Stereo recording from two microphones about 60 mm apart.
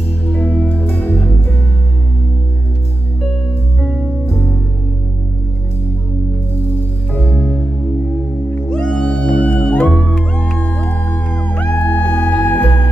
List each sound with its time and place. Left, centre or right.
0.3 s music: left
7.2 s music: left
8.6 s music: centre